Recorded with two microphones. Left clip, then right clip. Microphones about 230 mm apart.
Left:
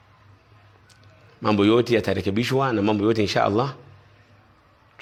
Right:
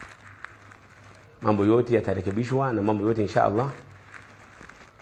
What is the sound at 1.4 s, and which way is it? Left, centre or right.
Speech, left.